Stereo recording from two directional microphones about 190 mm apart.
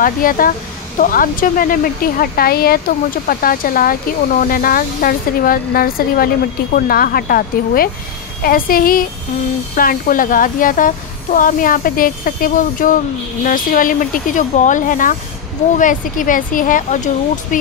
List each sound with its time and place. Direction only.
0.0 s speech: 45° left (ahead or behind)